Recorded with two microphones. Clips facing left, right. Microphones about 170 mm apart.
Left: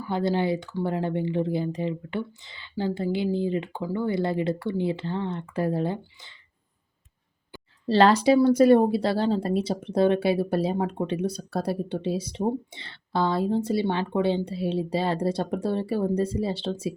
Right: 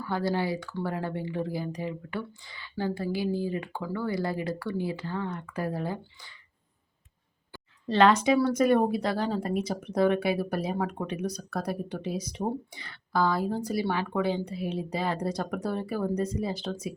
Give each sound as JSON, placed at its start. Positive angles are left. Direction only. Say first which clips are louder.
{"t": 0.0, "sound": "speech", "louder": "left 4 dB", "side_deg": 20}
{"t": 7.9, "sound": "a woman's voice", "louder": "left 3 dB", "side_deg": 35}